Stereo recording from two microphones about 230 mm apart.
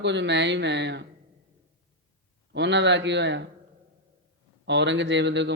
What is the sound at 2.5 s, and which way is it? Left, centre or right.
Speech, right.